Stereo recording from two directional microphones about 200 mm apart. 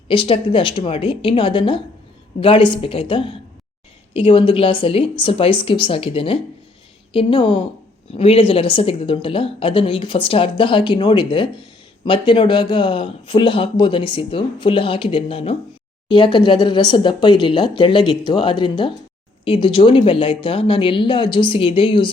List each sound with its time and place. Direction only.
0.1 s speech: 25° left (ahead or behind)